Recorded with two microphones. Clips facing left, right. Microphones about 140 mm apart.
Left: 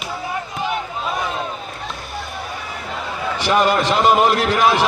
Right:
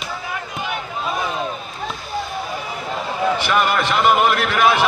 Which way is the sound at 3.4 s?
35° left (ahead or behind).